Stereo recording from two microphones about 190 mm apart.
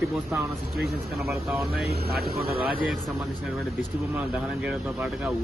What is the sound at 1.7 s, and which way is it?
Speech, 55° right (ahead or behind).